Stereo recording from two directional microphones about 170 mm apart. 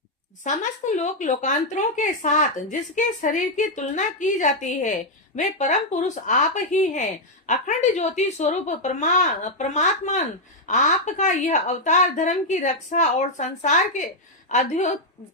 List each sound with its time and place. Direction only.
0.4 s speech: 45° left (ahead or behind)